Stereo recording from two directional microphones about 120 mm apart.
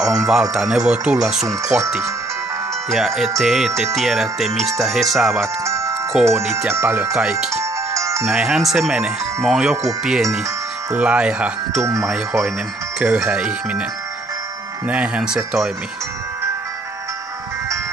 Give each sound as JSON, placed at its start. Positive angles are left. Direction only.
{"t": 0.0, "sound": "music", "side_deg": -5}
{"t": 1.7, "sound": "speech", "side_deg": -10}
{"t": 2.9, "sound": "music", "side_deg": 0}
{"t": 5.7, "sound": "music", "side_deg": -25}
{"t": 6.2, "sound": "speech", "side_deg": -20}
{"t": 7.2, "sound": "speech", "side_deg": -5}
{"t": 7.9, "sound": "music", "side_deg": -25}
{"t": 8.3, "sound": "music", "side_deg": -5}
{"t": 10.9, "sound": "speech", "side_deg": -10}
{"t": 11.8, "sound": "speech", "side_deg": -25}
{"t": 13.0, "sound": "speech", "side_deg": -10}
{"t": 14.9, "sound": "speech", "side_deg": -10}